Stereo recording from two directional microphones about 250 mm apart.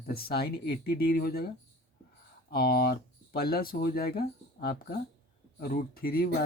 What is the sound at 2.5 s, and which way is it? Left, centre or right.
Speech, left.